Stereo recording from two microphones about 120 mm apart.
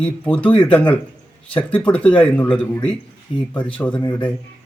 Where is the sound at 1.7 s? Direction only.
10° left (ahead or behind).